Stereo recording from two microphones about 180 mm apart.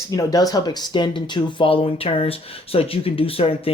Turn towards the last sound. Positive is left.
turn(degrees=30)  # may be behind; listen again after turning